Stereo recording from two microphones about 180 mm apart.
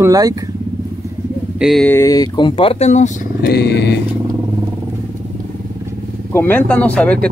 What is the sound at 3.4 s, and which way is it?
Speech, 65° left (ahead or behind).